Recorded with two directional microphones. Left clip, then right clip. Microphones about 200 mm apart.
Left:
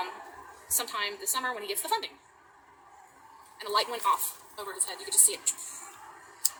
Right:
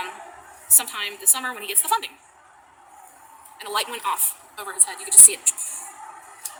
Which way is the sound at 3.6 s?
60° right (ahead or behind).